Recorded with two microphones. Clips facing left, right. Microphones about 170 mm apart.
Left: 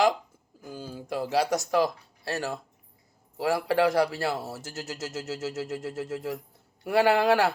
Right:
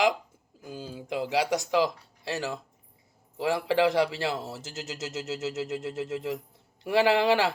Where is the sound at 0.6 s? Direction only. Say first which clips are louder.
Even; 15° right (ahead or behind).